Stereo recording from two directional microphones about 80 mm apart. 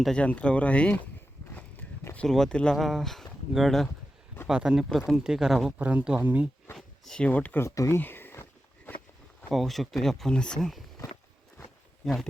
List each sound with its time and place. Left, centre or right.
0.2 s speech: centre
2.2 s speech: centre
4.9 s speech: centre
5.1 s speech: centre
5.8 s speech: centre
6.7 s speech: centre
7.3 s speech: centre
7.6 s speech: left
8.9 s a sound: left
9.5 s speech: centre
12.0 s speech: centre